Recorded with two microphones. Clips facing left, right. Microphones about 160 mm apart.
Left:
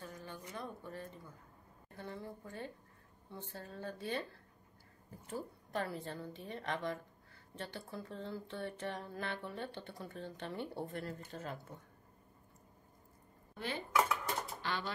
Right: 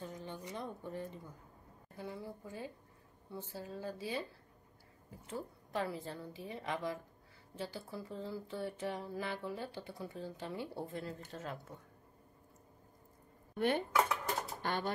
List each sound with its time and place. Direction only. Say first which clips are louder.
0.0 s speech: right 3 dB; 20° right (ahead or behind)
2.0 s speech: right 1 dB; 5° right (ahead or behind)
13.6 s speech: right 9 dB; 55° right (ahead or behind)
14.6 s a sound: right 3 dB; 50° right (ahead or behind)